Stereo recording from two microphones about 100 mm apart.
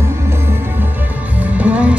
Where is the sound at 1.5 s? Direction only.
15° right (ahead or behind).